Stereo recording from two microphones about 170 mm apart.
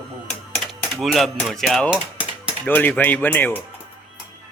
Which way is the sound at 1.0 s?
Centre (ahead or behind).